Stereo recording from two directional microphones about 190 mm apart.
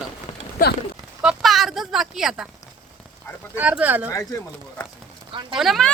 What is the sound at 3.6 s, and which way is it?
Speech, 10° right (ahead or behind).